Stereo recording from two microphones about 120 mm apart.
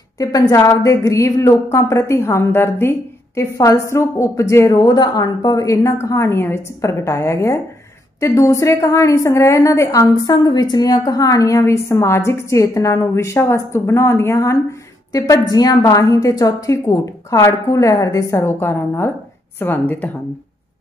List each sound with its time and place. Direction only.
0.2 s a woman's voice: 25° left (ahead or behind)